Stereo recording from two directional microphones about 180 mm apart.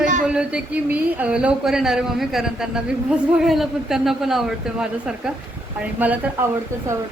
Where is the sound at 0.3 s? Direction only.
5° right (ahead or behind).